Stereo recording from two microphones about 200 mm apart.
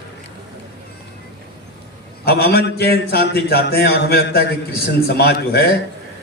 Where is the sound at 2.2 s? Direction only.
50° left (ahead or behind).